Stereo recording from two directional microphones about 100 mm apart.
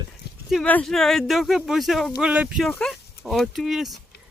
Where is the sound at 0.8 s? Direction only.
5° left (ahead or behind); by 2.6 s 10° right (ahead or behind).